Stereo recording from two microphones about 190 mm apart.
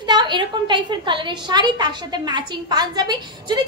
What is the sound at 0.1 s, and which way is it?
A woman's voice, 25° right (ahead or behind).